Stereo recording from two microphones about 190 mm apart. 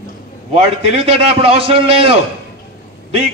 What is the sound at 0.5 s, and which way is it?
A man's voice, 30° right (ahead or behind).